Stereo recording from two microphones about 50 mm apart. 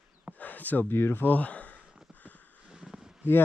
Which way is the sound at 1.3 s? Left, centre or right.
Left.